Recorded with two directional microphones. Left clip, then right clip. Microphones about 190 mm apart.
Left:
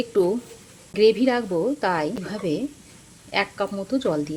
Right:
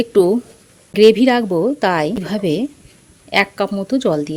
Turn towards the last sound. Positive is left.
turn(degrees=-35)  # may be behind; listen again after turning